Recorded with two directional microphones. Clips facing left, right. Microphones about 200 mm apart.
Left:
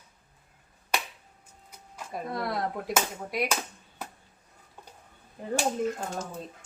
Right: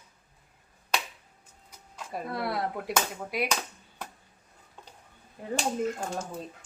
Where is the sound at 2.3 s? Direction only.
5° right (ahead or behind).